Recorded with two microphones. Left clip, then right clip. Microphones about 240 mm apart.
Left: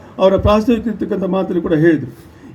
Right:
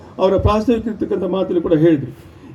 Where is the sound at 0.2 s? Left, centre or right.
Left.